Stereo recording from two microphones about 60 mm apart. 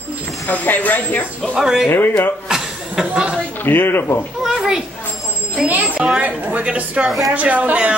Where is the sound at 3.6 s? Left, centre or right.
Left.